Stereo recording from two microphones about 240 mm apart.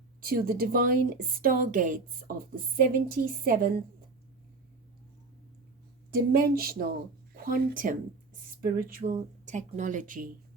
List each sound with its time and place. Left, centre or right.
0.2 s speech: right
6.3 s speech: right